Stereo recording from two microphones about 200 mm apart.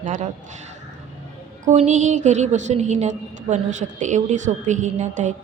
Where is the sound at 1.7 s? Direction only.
35° right (ahead or behind).